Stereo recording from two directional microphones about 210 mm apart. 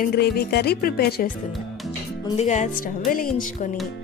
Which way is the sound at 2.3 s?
35° left (ahead or behind).